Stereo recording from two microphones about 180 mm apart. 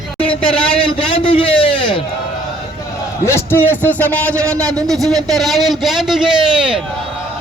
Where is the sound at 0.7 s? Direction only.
30° left (ahead or behind).